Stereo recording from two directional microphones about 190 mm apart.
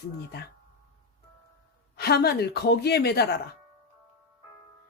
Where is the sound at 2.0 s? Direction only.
60° left (ahead or behind).